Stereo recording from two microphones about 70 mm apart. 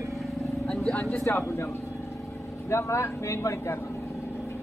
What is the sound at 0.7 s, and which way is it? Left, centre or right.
Vehicle, centre.